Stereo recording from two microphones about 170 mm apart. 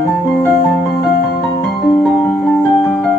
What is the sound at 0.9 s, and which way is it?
Music, 70° left (ahead or behind).